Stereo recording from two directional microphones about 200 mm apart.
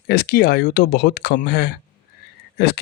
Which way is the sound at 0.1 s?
50° left (ahead or behind).